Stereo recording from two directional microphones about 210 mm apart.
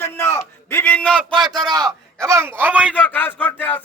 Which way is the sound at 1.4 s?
20° right (ahead or behind).